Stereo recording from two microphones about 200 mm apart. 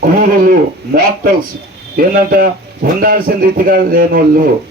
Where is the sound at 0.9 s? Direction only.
45° right (ahead or behind).